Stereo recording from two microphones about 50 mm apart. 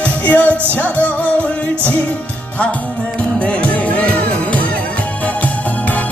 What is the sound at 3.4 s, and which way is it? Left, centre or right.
Music, left.